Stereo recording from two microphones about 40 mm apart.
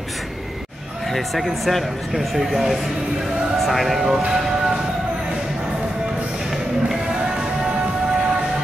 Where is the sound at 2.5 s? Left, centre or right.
Centre.